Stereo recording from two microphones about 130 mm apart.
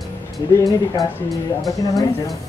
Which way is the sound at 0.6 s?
30° left (ahead or behind).